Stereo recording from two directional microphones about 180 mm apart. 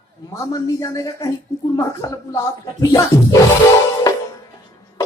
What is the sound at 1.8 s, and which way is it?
Speech, 15° left (ahead or behind).